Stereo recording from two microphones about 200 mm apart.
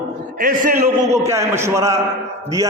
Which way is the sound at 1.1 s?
15° right (ahead or behind).